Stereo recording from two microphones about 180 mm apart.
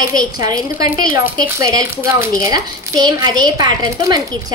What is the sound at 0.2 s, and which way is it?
A woman's voice, 25° right (ahead or behind).